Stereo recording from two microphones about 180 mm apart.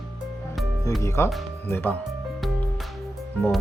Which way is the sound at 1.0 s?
15° left (ahead or behind).